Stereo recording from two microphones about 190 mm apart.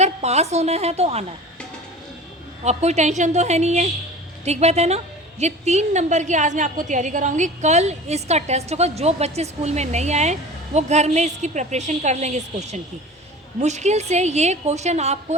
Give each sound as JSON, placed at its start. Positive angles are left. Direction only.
{"t": 0.0, "sound": "a woman's voice", "side_deg": -35}
{"t": 2.6, "sound": "a woman's voice", "side_deg": -35}